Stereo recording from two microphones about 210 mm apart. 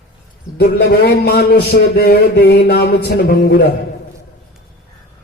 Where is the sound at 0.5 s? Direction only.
50° left (ahead or behind).